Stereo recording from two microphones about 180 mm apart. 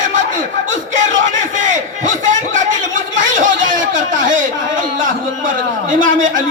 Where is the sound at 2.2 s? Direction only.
45° right (ahead or behind).